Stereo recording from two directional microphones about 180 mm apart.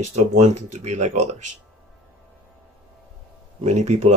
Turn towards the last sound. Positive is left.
turn(degrees=-40)  # may be behind; listen again after turning